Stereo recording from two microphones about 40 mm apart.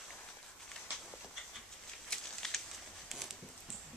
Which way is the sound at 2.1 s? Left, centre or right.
Centre.